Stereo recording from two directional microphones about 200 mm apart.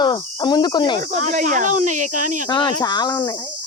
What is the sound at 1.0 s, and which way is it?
Speech, 35° right (ahead or behind).